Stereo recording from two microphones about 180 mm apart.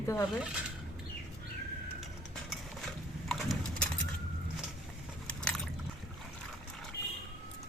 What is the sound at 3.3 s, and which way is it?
Pigeon, centre (ahead or behind).